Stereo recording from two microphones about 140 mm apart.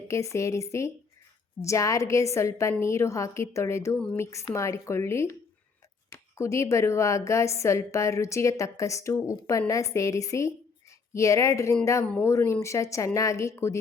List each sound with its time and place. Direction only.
0.1 s a woman's voice: 20° left (ahead or behind)
12.0 s a woman's voice: 10° left (ahead or behind)